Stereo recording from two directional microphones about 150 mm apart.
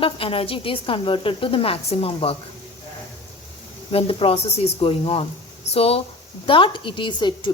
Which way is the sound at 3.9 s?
40° left (ahead or behind).